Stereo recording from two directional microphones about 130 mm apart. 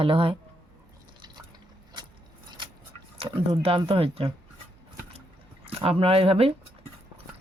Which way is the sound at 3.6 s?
45° right (ahead or behind).